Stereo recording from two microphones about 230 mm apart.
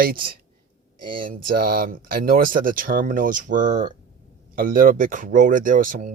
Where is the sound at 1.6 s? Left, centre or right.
Right.